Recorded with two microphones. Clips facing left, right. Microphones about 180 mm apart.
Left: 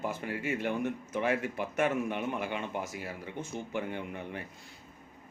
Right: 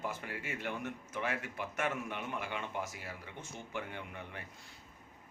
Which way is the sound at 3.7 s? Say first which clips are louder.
Left 6 dB; 20° left (ahead or behind).